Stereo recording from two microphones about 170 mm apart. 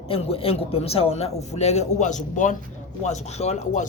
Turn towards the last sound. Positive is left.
turn(degrees=40)  # may be behind; listen again after turning